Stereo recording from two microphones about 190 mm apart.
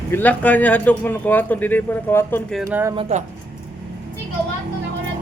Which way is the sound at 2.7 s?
15° right (ahead or behind).